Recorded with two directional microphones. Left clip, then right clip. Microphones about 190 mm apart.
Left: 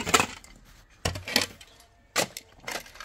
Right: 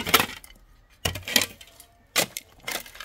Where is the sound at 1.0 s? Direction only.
Centre (ahead or behind).